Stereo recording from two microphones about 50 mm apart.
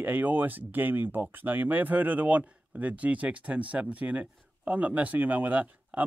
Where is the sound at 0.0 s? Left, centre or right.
Right.